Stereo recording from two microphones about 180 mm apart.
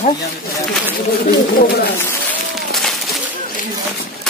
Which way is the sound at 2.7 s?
Centre (ahead or behind).